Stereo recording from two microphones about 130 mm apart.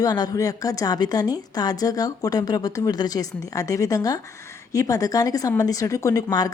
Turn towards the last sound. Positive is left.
turn(degrees=30)  # may be behind; listen again after turning